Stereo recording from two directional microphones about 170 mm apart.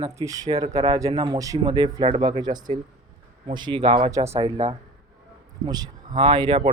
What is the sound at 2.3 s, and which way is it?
Speech, 25° right (ahead or behind).